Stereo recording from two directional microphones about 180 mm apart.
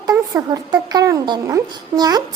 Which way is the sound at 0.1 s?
20° right (ahead or behind).